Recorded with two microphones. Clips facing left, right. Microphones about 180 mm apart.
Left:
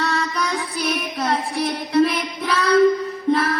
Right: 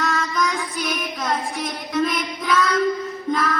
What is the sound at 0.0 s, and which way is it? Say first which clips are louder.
Music: even; 35° left (ahead or behind).